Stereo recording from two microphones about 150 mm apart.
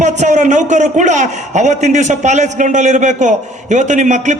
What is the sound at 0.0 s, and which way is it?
A man's voice, 50° right (ahead or behind).